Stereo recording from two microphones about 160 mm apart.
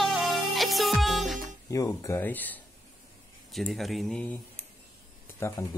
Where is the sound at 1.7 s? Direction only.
20° left (ahead or behind).